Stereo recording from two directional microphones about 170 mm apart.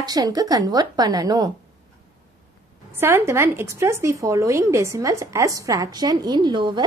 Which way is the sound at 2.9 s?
15° right (ahead or behind).